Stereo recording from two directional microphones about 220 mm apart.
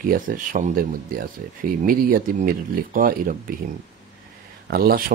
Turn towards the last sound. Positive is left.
turn(degrees=-45)  # may be behind; listen again after turning